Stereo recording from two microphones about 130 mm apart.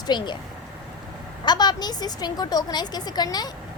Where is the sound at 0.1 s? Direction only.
35° left (ahead or behind).